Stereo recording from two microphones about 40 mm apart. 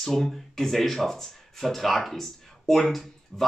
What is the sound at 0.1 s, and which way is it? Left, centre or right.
Speech, centre.